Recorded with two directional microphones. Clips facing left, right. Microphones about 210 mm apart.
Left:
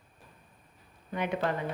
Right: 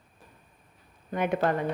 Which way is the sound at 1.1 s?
50° right (ahead or behind).